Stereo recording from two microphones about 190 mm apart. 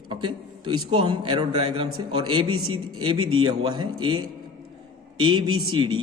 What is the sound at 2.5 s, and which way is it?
Speech, 90° right.